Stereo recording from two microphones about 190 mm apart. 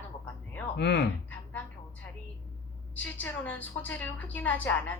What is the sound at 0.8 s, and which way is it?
Speech, 65° left (ahead or behind).